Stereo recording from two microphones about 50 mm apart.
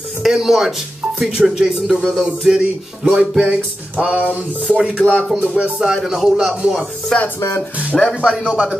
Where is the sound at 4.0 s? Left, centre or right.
Right.